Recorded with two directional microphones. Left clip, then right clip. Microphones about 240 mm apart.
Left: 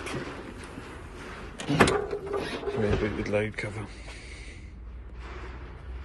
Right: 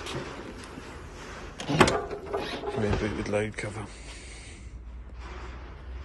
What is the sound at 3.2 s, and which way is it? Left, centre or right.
Speech, centre.